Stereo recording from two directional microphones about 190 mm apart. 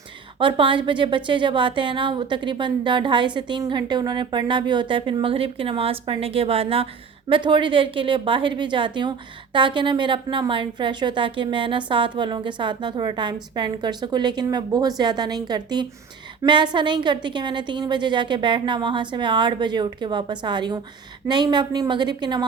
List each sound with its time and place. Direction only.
0.3 s a woman's voice: 25° right (ahead or behind)